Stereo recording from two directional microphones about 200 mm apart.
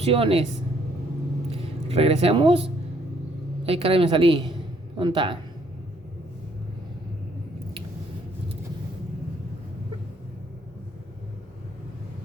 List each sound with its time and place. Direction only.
0.0 s a woman's voice: 30° right (ahead or behind)
1.5 s a woman's voice: 30° right (ahead or behind)